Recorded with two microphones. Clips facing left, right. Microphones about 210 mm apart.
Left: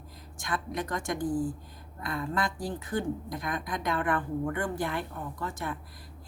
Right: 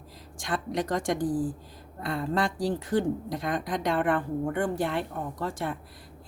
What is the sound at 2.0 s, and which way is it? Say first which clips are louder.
Speech: right 3 dB; 30° right (ahead or behind).